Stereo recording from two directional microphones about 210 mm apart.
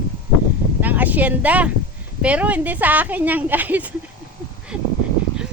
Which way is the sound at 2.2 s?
5° right (ahead or behind).